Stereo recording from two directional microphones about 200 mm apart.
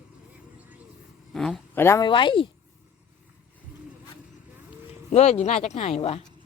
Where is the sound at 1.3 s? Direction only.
Centre (ahead or behind); by 2.5 s 25° left (ahead or behind).